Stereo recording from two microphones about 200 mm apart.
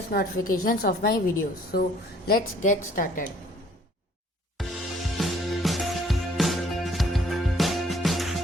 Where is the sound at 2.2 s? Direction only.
45° left (ahead or behind).